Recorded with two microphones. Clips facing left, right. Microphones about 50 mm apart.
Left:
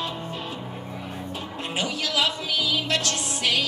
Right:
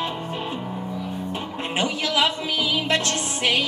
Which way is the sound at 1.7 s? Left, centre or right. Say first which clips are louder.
Right 3 dB; right.